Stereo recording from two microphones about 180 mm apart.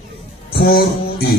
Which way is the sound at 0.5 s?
60° left (ahead or behind).